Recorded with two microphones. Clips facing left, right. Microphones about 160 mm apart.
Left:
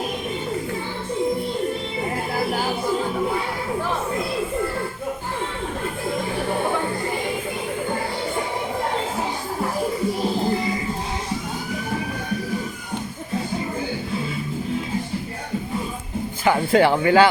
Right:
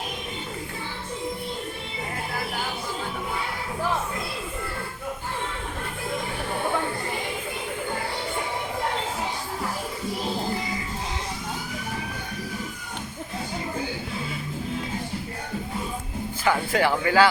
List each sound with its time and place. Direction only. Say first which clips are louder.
16.4 s speech: left 6 dB; 25° left (ahead or behind)